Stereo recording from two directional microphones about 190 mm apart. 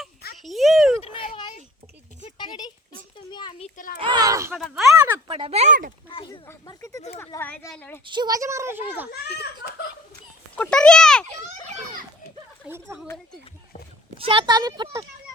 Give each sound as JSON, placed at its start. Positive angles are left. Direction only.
{"t": 0.4, "sound": "a sound", "side_deg": 0}
{"t": 1.0, "sound": "a sound", "side_deg": 30}
{"t": 4.0, "sound": "speech", "side_deg": -20}
{"t": 4.5, "sound": "a child's voice", "side_deg": 0}
{"t": 5.3, "sound": "speech", "side_deg": -30}
{"t": 6.1, "sound": "a sound", "side_deg": 30}
{"t": 6.4, "sound": "a sound", "side_deg": 15}
{"t": 7.2, "sound": "a woman's voice", "side_deg": 10}
{"t": 8.0, "sound": "a child's voice", "side_deg": -25}
{"t": 10.5, "sound": "a child's voice", "side_deg": 5}
{"t": 12.6, "sound": "a child's voice", "side_deg": -15}
{"t": 14.2, "sound": "speech", "side_deg": -30}